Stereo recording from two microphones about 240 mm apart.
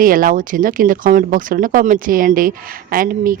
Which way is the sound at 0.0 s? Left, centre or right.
Right.